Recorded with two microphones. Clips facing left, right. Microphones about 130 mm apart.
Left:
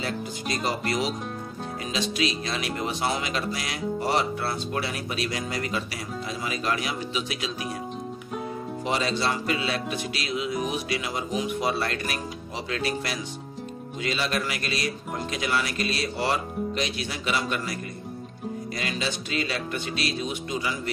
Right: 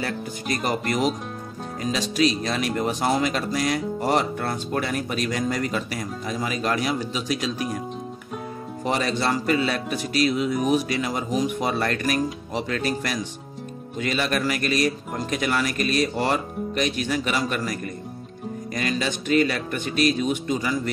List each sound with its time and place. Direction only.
1.9 s speech: 40° right (ahead or behind)
8.9 s speech: 45° right (ahead or behind)
18.8 s speech: 45° right (ahead or behind)